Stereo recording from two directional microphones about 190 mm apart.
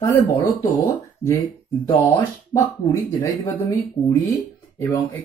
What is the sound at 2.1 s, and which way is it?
Speech, 15° left (ahead or behind).